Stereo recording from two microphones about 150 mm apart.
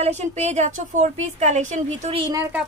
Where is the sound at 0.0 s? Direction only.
45° right (ahead or behind).